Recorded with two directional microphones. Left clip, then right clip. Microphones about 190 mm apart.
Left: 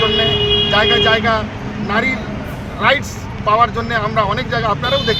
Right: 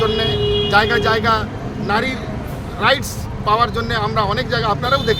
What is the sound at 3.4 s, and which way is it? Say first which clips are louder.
Speech: left 3 dB; 25° right (ahead or behind).